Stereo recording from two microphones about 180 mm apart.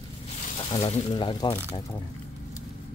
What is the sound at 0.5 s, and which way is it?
Speech, 35° left (ahead or behind).